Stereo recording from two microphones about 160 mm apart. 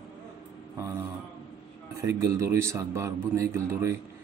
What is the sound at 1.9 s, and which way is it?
A man's voice, 20° right (ahead or behind).